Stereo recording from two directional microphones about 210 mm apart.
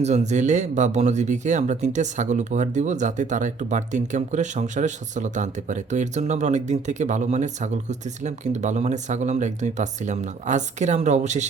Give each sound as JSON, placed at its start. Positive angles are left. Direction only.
{"t": 0.0, "sound": "speech", "side_deg": -35}